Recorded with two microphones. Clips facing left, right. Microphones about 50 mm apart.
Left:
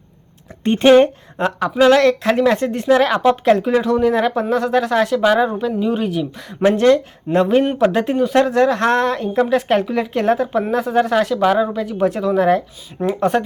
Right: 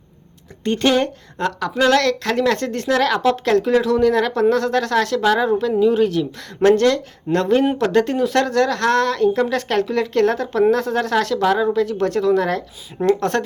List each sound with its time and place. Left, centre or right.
0.6 s a woman's voice: left